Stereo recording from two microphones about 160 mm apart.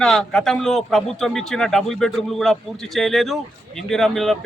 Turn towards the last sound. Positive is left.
turn(degrees=0)  # may be behind; listen again after turning